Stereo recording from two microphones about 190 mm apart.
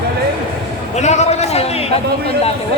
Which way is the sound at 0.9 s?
35° left (ahead or behind).